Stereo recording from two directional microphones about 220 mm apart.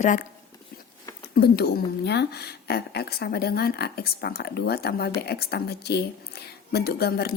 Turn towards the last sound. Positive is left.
turn(degrees=45)  # may be behind; listen again after turning